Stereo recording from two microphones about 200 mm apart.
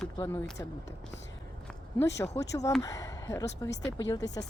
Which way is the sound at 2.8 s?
20° left (ahead or behind).